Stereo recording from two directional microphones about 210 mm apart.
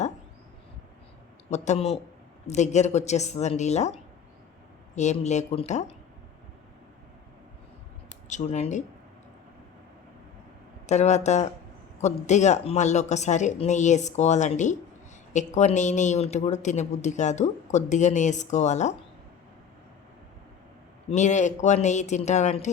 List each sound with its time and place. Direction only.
1.5 s a woman's voice: 35° left (ahead or behind)
8.3 s a woman's voice: 35° left (ahead or behind)
10.8 s a woman's voice: 35° left (ahead or behind)
21.1 s a woman's voice: 35° left (ahead or behind)